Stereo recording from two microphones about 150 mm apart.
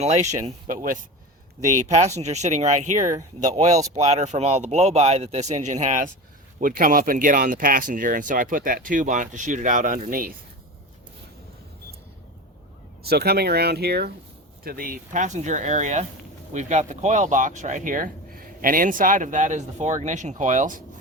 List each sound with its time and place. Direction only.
0.0 s a man's voice: 50° right (ahead or behind)
1.7 s a man's voice: 50° right (ahead or behind); by 10.3 s 70° right (ahead or behind)
13.0 s a man's voice: 90° right; by 20.8 s 60° right (ahead or behind)